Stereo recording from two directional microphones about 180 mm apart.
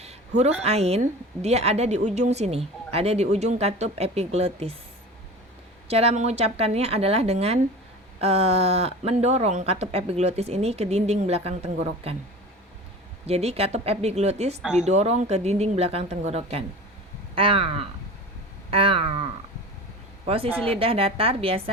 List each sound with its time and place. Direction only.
0.0 s a sound: 35° right (ahead or behind)
0.6 s a woman's voice: 35° right (ahead or behind)
5.9 s a woman's voice: 35° right (ahead or behind)
13.2 s a woman's voice: 35° right (ahead or behind)
18.7 s a sound: 30° right (ahead or behind)
20.2 s a woman's voice: 30° right (ahead or behind)